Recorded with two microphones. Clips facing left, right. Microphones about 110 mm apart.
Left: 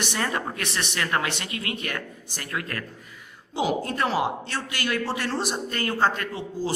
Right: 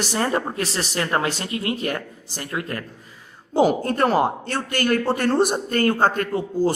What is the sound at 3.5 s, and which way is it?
A man's voice, 45° right (ahead or behind).